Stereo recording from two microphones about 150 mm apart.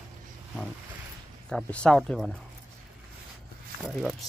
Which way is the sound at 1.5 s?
5° left (ahead or behind).